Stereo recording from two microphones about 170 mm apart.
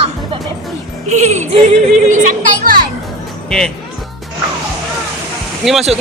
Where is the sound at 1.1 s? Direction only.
45° right (ahead or behind).